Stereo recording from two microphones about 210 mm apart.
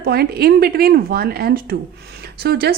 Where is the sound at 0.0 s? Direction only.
50° right (ahead or behind).